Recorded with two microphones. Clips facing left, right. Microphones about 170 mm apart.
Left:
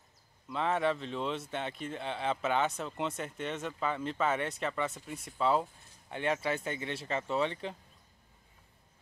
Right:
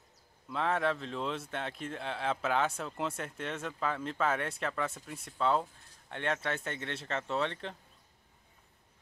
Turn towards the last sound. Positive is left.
turn(degrees=5)  # may be behind; listen again after turning